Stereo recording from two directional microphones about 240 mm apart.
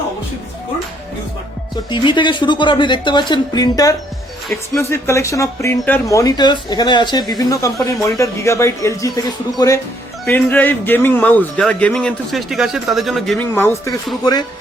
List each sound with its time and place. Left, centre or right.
1.7 s speech: centre